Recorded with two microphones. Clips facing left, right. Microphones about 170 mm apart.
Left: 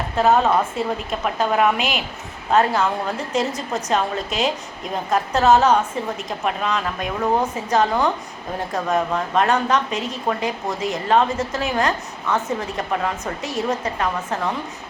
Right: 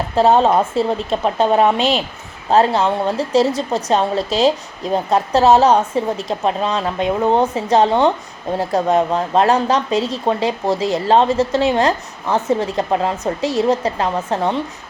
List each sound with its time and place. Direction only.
0.2 s a woman's voice: 30° right (ahead or behind)